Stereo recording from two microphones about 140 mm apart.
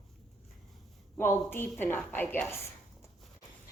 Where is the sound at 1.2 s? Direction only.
15° left (ahead or behind).